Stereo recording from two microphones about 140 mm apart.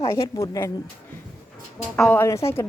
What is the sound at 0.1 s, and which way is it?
Speech, 25° left (ahead or behind).